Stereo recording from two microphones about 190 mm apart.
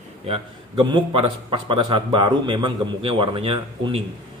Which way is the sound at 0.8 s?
25° right (ahead or behind).